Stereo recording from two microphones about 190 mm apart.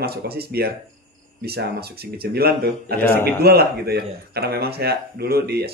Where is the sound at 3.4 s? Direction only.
55° right (ahead or behind).